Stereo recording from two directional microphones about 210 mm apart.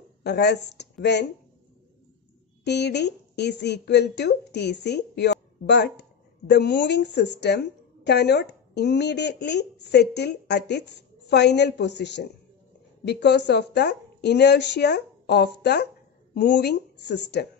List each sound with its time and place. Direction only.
0.2 s a woman's voice: 55° left (ahead or behind)
2.6 s a woman's voice: 55° left (ahead or behind)